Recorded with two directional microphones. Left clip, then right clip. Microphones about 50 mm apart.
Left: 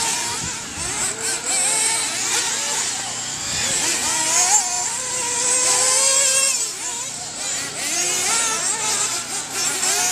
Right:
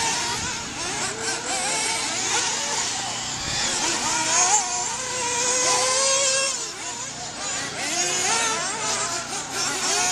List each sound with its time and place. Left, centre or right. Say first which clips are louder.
1.5 s vehicle: left 4 dB; centre
4.0 s vehicle: even; centre
5.2 s vehicle: left 1 dB; right
7.9 s vehicle: left 2 dB; right